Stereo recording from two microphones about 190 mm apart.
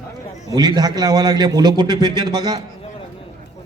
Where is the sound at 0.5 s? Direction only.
20° right (ahead or behind).